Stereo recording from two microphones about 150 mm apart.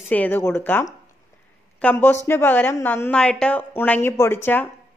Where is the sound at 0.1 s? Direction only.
10° left (ahead or behind).